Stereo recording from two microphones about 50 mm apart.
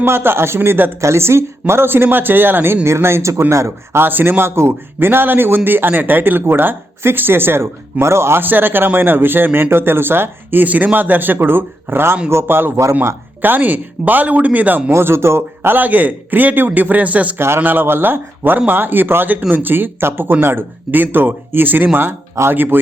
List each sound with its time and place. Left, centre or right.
0.0 s a man's voice: right
1.0 s a man's voice: right
2.8 s speech: right
3.5 s speech: right
4.0 s a man's voice: right
8.4 s a man's voice: right
13.4 s speech: right
14.8 s speech: right
15.7 s speech: right
17.3 s speech: right
17.6 s a man's voice: right